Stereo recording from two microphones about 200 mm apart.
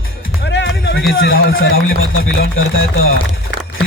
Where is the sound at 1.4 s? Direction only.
50° left (ahead or behind).